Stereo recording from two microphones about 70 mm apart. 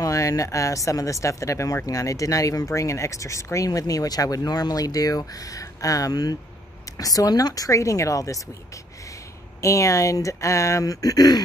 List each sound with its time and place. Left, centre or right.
0.0 s speech: left
9.6 s speech: left